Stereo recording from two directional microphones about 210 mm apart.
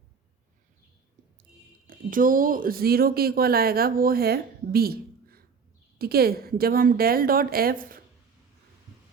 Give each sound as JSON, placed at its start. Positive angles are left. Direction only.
{"t": 1.9, "sound": "a woman's voice", "side_deg": -40}